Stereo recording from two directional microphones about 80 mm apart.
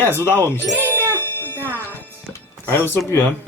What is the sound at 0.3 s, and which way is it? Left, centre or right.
Speech, left.